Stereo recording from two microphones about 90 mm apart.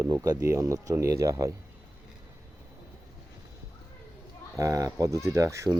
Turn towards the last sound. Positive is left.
turn(degrees=-35)  # may be behind; listen again after turning